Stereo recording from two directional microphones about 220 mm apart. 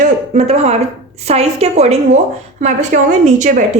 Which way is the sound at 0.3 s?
30° right (ahead or behind).